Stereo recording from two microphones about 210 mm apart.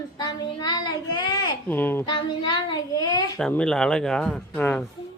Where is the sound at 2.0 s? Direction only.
20° left (ahead or behind).